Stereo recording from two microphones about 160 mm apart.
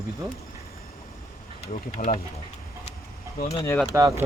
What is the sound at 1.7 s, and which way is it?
Speech, 45° left (ahead or behind).